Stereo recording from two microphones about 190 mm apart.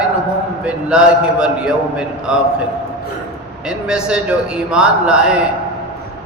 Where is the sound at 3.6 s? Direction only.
5° right (ahead or behind).